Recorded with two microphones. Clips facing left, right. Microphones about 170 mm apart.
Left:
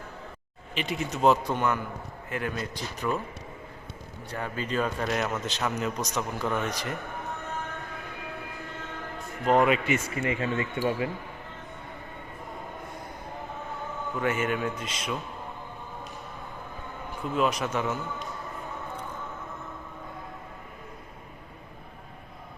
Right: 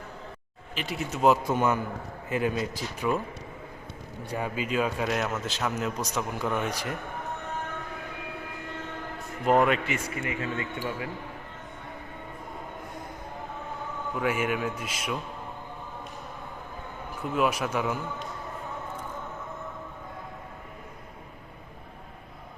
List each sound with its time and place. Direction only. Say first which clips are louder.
0.8 s a man's voice: left 1 dB; centre (ahead or behind)
4.3 s a man's voice: right 2 dB; 10° right (ahead or behind)
9.5 s a man's voice: even; centre (ahead or behind)
9.8 s speech: left 4 dB; 25° left (ahead or behind)
14.2 s a man's voice: even; 10° right (ahead or behind)
17.3 s a man's voice: even; 5° right (ahead or behind)